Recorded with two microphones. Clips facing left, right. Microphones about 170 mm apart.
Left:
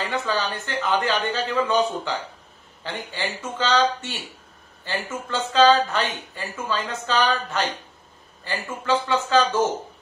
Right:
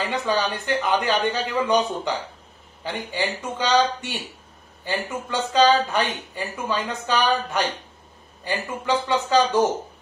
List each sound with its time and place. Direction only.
0.1 s speech: 15° right (ahead or behind)